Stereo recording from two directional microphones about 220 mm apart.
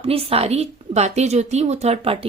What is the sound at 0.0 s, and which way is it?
Speech, 25° right (ahead or behind).